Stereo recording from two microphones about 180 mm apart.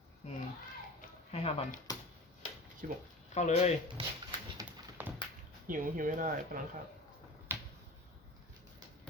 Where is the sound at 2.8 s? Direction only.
50° right (ahead or behind).